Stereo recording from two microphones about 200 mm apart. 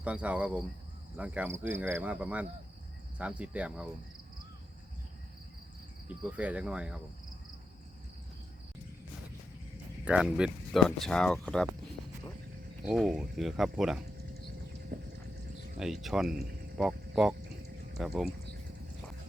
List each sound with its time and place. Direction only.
0.0 s cricket: 5° right (ahead or behind)
6.1 s speech: 5° right (ahead or behind)
10.0 s speech: 5° right (ahead or behind)
12.9 s speech: centre (ahead or behind)
14.9 s clip-clop: 45° right (ahead or behind)
15.8 s speech: centre (ahead or behind)